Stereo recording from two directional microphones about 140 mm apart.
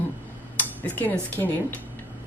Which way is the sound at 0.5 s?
10° left (ahead or behind).